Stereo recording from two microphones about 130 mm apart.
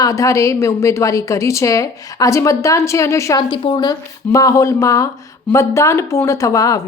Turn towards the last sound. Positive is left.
turn(degrees=25)  # may be behind; listen again after turning